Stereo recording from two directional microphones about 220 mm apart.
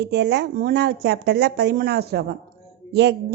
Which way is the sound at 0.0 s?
50° right (ahead or behind).